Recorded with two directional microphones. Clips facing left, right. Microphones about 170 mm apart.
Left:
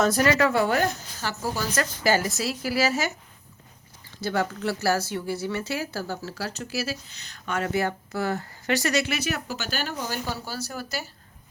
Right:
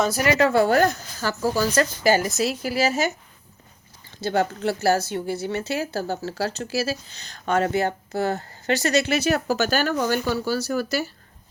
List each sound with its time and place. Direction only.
0.3 s speech: 30° right (ahead or behind)
2.0 s speech: 20° right (ahead or behind)
4.2 s speech: 25° right (ahead or behind); by 9.9 s 45° right (ahead or behind)
9.9 s speech: 65° right (ahead or behind)